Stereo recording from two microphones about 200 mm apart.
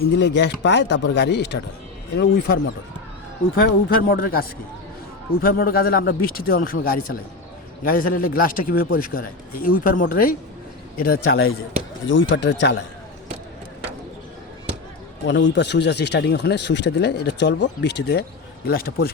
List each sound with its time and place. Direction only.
0.1 s speech: 60° left (ahead or behind)
3.8 s a man's voice: 45° left (ahead or behind)
12.3 s speech: 65° left (ahead or behind)
15.3 s speech: 60° left (ahead or behind)